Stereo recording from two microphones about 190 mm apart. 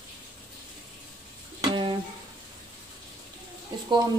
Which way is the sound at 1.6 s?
25° right (ahead or behind).